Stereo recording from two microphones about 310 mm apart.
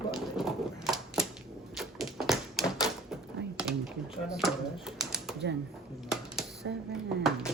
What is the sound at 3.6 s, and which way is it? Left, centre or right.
Typing, centre.